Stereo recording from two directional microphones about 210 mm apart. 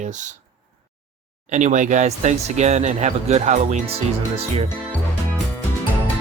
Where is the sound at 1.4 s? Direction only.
35° right (ahead or behind).